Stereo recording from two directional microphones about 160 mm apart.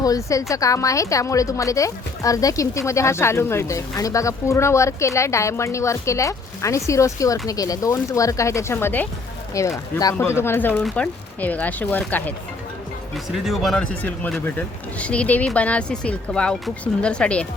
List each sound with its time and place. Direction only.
0.0 s a woman's voice: 20° left (ahead or behind)
13.1 s speech: centre (ahead or behind)